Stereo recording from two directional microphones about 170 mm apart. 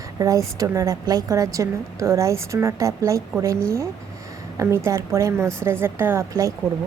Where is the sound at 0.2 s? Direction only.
20° right (ahead or behind).